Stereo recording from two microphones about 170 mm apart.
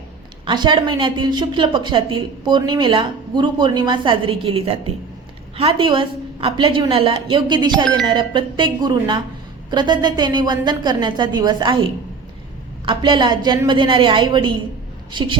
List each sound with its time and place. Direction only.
0.4 s a woman's voice: 25° right (ahead or behind)